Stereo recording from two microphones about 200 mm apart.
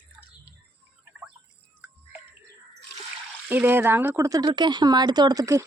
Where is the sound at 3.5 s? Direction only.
10° right (ahead or behind).